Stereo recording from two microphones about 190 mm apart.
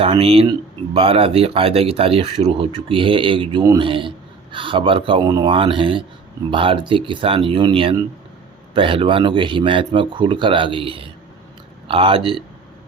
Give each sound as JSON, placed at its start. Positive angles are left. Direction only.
{"t": 0.0, "sound": "speech", "side_deg": -30}